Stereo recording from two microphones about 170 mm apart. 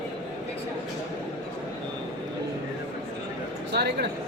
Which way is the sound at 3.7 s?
75° right (ahead or behind).